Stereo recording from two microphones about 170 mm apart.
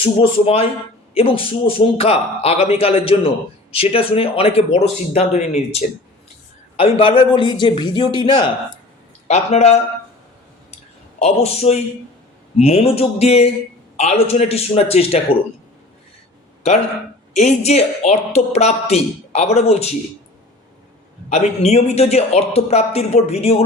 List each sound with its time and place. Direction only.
0.0 s a man's voice: 35° left (ahead or behind)
9.2 s a man's voice: 40° left (ahead or behind)
11.2 s a man's voice: 40° left (ahead or behind)
17.3 s a man's voice: 40° left (ahead or behind)
21.2 s a man's voice: 40° left (ahead or behind)